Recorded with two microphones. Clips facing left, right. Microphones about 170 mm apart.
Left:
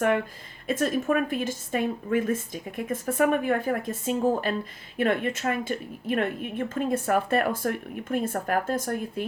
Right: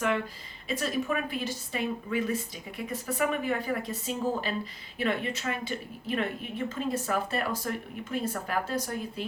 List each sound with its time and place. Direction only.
0.7 s a woman's voice: 50° left (ahead or behind)